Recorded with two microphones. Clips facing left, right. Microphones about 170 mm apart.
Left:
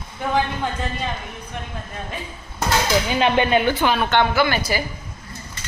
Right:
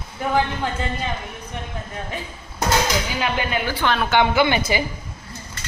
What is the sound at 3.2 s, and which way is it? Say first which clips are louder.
Speech: left 6 dB; 25° left (ahead or behind).